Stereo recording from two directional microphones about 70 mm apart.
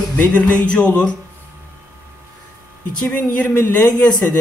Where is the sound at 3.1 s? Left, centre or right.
Left.